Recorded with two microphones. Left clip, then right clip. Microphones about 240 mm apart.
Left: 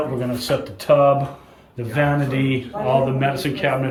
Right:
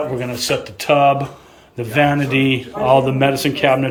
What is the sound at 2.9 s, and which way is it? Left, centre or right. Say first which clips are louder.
Speech: right 5 dB; centre.